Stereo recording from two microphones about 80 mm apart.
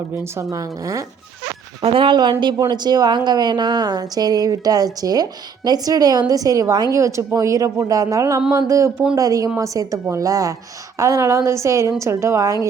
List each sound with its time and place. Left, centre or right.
0.3 s a woman's voice: right
2.0 s speech: right
2.6 s a woman's voice: right
6.9 s a woman's voice: right